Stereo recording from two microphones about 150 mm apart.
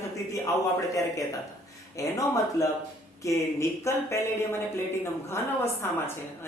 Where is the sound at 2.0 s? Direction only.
20° left (ahead or behind).